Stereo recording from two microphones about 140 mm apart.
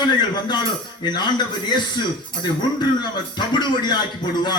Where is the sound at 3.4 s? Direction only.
30° left (ahead or behind).